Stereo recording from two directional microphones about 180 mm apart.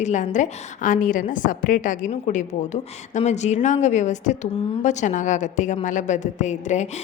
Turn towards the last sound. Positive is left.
turn(degrees=40)  # may be behind; listen again after turning